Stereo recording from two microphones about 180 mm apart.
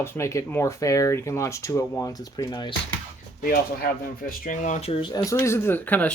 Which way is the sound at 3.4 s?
55° left (ahead or behind).